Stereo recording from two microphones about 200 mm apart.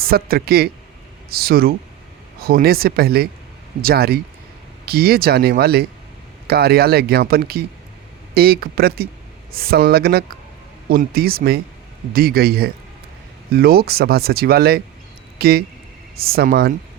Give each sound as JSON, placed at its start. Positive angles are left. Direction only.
{"t": 0.0, "sound": "speech", "side_deg": -50}